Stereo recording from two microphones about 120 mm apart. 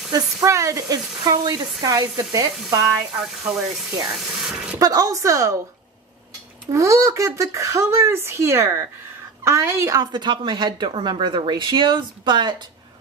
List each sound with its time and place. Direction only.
0.1 s a woman's voice: 25° right (ahead or behind)
3.2 s speech: 5° right (ahead or behind)
4.7 s speech: 30° right (ahead or behind)
6.7 s a woman's voice: 25° right (ahead or behind)